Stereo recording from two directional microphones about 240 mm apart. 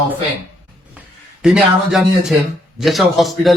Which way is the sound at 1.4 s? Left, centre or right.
Centre.